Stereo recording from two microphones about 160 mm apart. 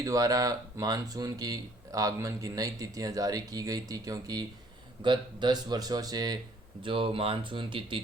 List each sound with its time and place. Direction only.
0.0 s speech: 20° right (ahead or behind)